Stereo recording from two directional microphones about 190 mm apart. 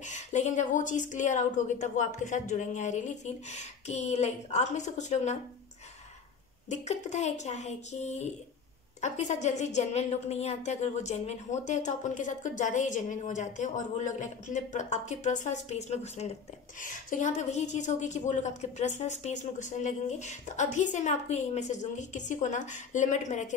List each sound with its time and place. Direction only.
0.0 s a woman's voice: 40° left (ahead or behind)
6.7 s a woman's voice: 35° left (ahead or behind)